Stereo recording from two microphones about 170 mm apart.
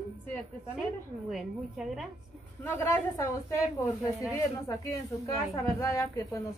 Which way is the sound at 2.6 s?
15° left (ahead or behind).